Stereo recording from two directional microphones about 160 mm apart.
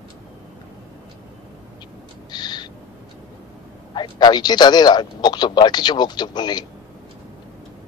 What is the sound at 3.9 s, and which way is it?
Speech, 30° left (ahead or behind).